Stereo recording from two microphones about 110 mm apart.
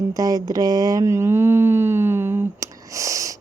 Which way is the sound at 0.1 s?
35° right (ahead or behind).